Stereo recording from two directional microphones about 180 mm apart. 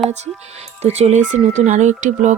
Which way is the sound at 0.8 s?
35° right (ahead or behind).